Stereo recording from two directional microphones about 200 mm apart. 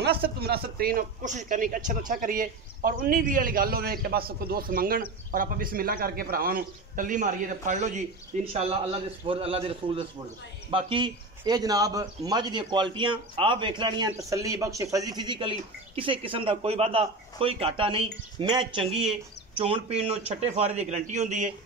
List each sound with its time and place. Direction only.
0.4 s a man's voice: 50° right (ahead or behind)